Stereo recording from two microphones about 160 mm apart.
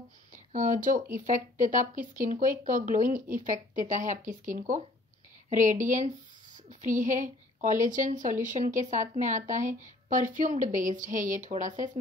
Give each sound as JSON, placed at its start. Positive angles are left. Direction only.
{"t": 0.3, "sound": "a woman's voice", "side_deg": -55}